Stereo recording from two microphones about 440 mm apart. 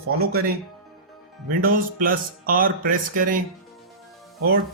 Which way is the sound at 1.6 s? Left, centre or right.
Centre.